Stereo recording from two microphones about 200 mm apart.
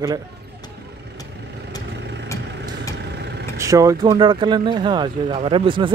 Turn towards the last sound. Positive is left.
turn(degrees=-25)  # may be behind; listen again after turning